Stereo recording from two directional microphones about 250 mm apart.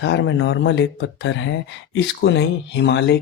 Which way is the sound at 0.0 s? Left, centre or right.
Left.